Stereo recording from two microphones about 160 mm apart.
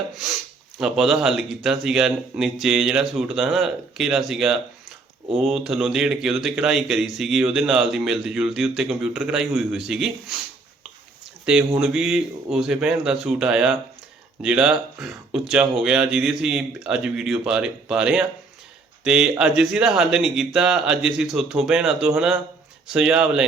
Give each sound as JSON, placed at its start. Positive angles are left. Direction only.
{"t": 0.8, "sound": "a man's voice", "side_deg": -5}
{"t": 11.5, "sound": "a man's voice", "side_deg": -5}